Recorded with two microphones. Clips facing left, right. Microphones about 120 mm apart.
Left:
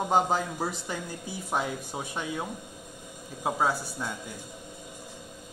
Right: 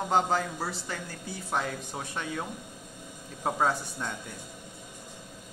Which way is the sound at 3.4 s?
5° left (ahead or behind).